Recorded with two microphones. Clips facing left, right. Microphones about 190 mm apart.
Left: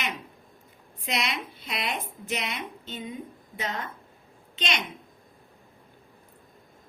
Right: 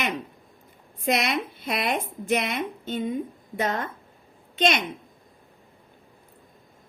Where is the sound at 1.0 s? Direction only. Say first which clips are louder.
Right 7 dB; 50° right (ahead or behind).